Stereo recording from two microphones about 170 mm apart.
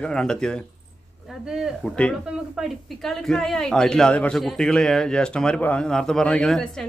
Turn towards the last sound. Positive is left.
turn(degrees=5)  # may be behind; listen again after turning